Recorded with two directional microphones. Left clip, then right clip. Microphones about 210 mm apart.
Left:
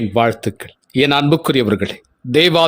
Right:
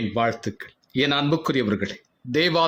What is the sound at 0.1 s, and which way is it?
Speech, 40° left (ahead or behind).